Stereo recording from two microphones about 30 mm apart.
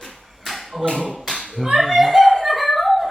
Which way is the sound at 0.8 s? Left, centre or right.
Left.